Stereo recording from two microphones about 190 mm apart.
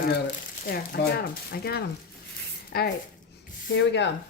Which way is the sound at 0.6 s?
55° left (ahead or behind).